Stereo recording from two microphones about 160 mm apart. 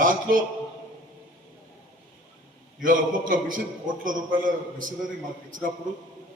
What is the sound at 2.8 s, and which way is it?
Speech, 60° right (ahead or behind).